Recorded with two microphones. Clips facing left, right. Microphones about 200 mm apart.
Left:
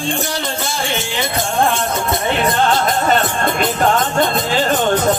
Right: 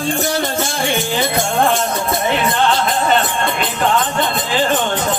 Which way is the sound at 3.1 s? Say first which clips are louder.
Even; 45° left (ahead or behind).